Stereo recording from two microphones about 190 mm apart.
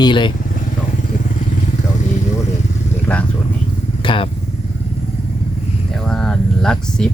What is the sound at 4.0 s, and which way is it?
Vehicle, 25° left (ahead or behind).